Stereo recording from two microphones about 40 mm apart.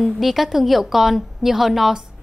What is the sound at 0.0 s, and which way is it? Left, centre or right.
A woman's voice, centre.